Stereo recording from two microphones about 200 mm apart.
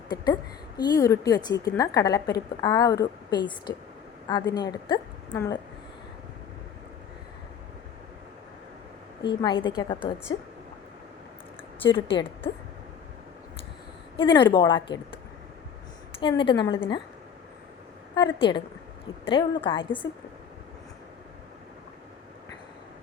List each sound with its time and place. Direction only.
0.8 s a woman's voice: 20° left (ahead or behind)
9.3 s a woman's voice: 20° left (ahead or behind)
11.8 s a woman's voice: 25° left (ahead or behind)
14.2 s a woman's voice: 25° left (ahead or behind)
16.2 s a woman's voice: 25° left (ahead or behind)
18.1 s a woman's voice: 20° left (ahead or behind)